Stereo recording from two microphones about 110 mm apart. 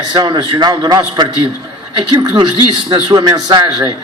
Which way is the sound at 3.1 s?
35° right (ahead or behind).